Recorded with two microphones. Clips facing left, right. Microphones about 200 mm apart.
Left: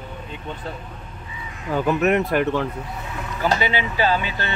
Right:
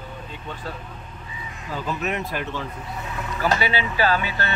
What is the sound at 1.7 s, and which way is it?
Speech, 65° left (ahead or behind).